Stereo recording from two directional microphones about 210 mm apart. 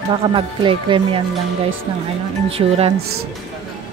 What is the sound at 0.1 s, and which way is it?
Speech, 25° right (ahead or behind).